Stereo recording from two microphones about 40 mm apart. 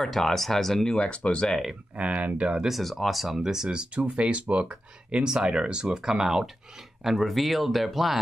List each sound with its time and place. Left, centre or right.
0.0 s speech: centre
0.8 s speech: left
2.0 s speech: right
2.7 s speech: centre
3.3 s speech: centre